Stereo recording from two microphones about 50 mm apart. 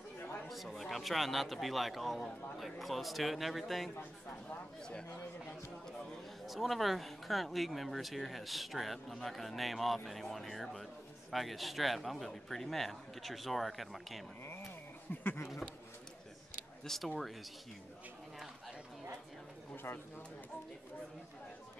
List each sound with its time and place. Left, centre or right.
0.5 s a man's voice: centre
6.4 s a man's voice: centre
15.1 s speech: left
16.8 s a man's voice: centre
19.7 s bird: left